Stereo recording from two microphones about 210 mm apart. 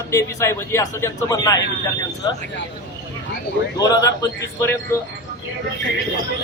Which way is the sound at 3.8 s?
15° left (ahead or behind).